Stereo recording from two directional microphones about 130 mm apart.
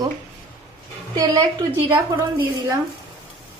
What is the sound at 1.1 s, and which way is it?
Speech, 30° right (ahead or behind).